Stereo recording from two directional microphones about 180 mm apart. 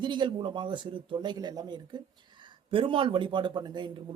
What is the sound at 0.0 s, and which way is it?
Speech, 25° right (ahead or behind).